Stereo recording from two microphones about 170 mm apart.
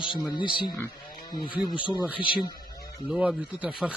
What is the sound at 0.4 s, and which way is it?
Speech, 30° left (ahead or behind).